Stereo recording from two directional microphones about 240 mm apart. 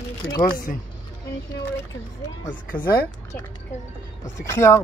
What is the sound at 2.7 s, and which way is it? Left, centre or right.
Speech, left.